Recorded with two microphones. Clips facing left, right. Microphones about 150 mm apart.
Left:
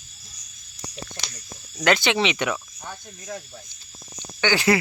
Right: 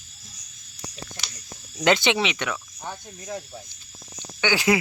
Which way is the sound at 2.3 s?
10° left (ahead or behind).